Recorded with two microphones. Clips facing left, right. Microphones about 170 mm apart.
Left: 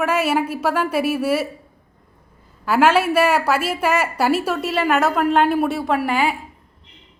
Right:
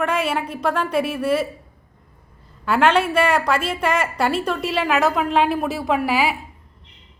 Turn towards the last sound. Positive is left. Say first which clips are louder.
# even
turn(degrees=-5)  # may be behind; listen again after turning